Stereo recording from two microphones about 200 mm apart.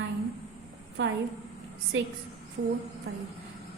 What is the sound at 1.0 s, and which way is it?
Speech, 75° right (ahead or behind).